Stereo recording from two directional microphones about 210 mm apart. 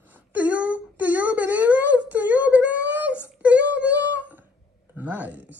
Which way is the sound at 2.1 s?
10° right (ahead or behind).